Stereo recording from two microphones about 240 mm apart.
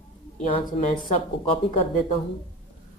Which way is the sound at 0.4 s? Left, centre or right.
Left.